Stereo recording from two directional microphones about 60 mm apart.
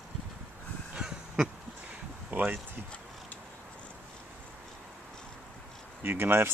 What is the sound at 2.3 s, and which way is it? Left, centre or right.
Speech, right.